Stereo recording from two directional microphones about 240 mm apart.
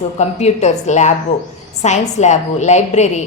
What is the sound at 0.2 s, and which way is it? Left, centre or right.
A woman's voice, left.